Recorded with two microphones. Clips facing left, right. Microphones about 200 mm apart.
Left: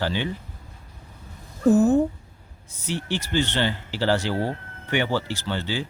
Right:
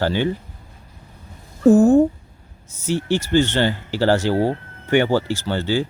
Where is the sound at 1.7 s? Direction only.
45° right (ahead or behind).